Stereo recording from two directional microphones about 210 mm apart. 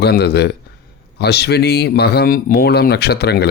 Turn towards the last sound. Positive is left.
turn(degrees=50)  # may be behind; listen again after turning